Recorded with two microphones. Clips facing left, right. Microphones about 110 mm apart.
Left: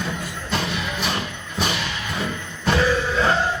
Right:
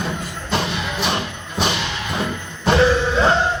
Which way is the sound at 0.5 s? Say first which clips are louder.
Right 3 dB; 20° right (ahead or behind).